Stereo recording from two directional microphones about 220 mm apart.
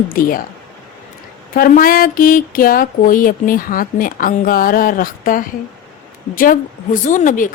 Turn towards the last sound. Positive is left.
turn(degrees=35)  # may be behind; listen again after turning